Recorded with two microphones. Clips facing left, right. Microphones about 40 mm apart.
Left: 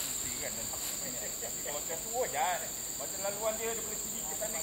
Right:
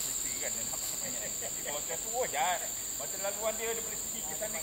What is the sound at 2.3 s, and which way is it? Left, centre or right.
Speech, right.